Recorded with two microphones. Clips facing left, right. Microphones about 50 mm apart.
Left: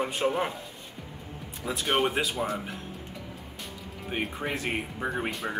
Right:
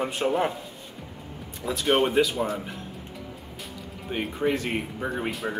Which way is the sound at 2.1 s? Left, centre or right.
Centre.